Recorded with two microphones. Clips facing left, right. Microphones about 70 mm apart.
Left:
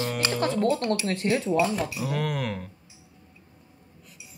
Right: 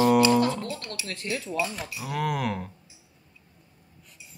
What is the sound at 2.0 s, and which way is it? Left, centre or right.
Speech, centre.